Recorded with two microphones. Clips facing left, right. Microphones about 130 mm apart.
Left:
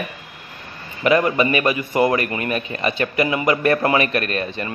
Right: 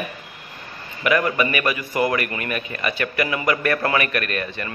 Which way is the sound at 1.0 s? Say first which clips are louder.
Left 3 dB; 25° left (ahead or behind).